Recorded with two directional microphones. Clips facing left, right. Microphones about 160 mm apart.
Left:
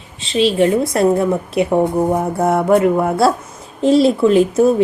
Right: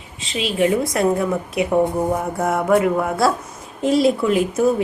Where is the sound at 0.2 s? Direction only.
30° left (ahead or behind).